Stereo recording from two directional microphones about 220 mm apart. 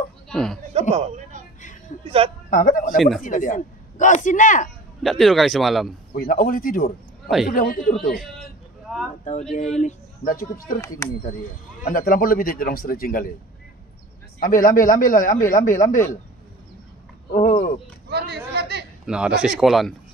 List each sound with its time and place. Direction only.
0.3 s speech: centre (ahead or behind)
0.7 s a woman's voice: 30° right (ahead or behind)
2.5 s speech: 35° left (ahead or behind)
5.0 s speech: centre (ahead or behind)
6.1 s speech: 40° left (ahead or behind)
8.9 s a sound: centre (ahead or behind)
9.2 s speech: 30° left (ahead or behind)
11.0 s speech: 15° left (ahead or behind)
11.8 s speech: 40° left (ahead or behind)
14.4 s speech: 40° left (ahead or behind)
17.3 s a sound: 35° left (ahead or behind)
18.1 s a sound: 50° right (ahead or behind)
19.0 s speech: 5° right (ahead or behind)